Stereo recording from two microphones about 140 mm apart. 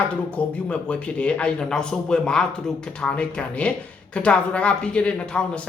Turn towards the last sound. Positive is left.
turn(degrees=5)  # may be behind; listen again after turning